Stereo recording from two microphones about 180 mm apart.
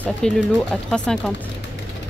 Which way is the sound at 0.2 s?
5° left (ahead or behind).